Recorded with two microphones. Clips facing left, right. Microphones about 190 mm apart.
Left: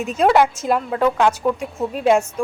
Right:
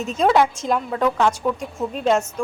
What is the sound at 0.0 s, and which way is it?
A woman's voice, 10° left (ahead or behind).